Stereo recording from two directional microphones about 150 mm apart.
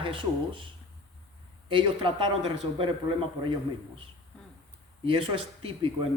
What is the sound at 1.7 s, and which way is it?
Speech, 35° right (ahead or behind).